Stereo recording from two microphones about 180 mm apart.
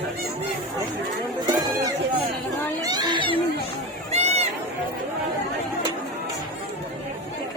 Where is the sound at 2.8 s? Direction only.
20° right (ahead or behind).